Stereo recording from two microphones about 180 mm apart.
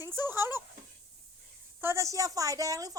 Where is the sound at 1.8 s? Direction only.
15° right (ahead or behind).